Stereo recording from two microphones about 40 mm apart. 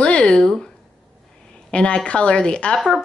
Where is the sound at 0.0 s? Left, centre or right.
Left.